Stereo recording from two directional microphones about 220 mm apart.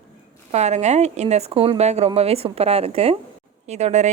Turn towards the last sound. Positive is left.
turn(degrees=-30)  # may be behind; listen again after turning